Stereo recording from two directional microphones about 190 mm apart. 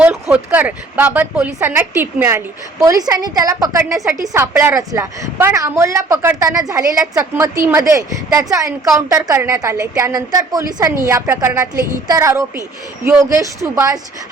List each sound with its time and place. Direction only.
0.0 s a woman's voice: 5° right (ahead or behind)